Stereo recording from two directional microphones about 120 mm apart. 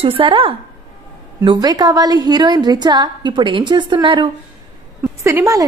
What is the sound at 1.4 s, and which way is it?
A woman's voice, 30° right (ahead or behind).